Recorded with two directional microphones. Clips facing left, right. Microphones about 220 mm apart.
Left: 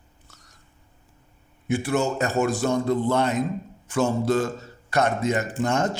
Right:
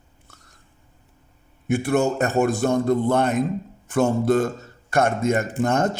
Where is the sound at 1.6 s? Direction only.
55° right (ahead or behind).